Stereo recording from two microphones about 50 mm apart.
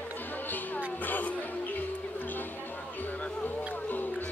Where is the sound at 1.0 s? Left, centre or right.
Left.